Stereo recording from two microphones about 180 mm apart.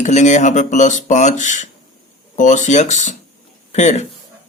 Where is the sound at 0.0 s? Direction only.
40° left (ahead or behind).